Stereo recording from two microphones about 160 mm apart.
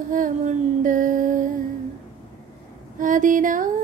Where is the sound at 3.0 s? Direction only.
55° right (ahead or behind).